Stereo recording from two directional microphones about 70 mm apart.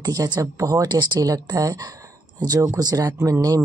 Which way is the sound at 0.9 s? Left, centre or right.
Right.